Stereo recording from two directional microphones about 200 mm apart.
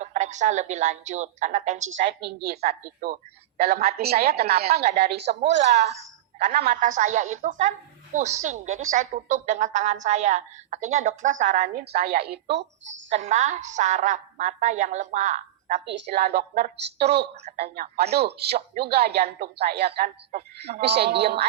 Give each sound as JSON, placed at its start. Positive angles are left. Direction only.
{"t": 0.0, "sound": "a woman's voice", "side_deg": -35}
{"t": 1.9, "sound": "a woman's voice", "side_deg": -55}
{"t": 5.7, "sound": "a woman's voice", "side_deg": -35}
{"t": 6.5, "sound": "a woman's voice", "side_deg": -50}
{"t": 13.1, "sound": "a woman's voice", "side_deg": -35}
{"t": 15.9, "sound": "a woman's voice", "side_deg": -55}